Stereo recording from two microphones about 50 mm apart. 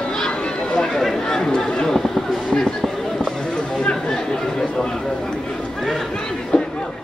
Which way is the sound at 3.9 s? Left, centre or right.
Centre.